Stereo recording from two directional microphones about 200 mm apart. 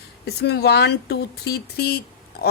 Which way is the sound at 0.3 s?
55° left (ahead or behind).